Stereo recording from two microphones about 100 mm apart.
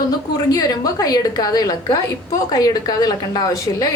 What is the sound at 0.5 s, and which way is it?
A woman's voice, 40° left (ahead or behind).